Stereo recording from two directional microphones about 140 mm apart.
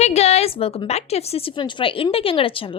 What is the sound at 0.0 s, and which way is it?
A woman's voice, 50° left (ahead or behind).